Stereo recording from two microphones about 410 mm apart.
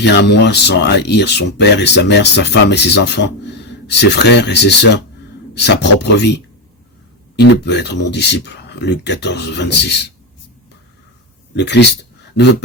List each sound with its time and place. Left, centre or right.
0.0 s speech: left
7.3 s speech: left
11.5 s speech: left